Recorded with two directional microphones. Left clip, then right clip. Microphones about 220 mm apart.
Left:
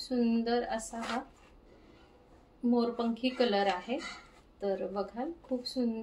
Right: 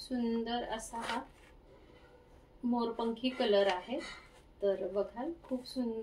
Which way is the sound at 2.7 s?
30° left (ahead or behind).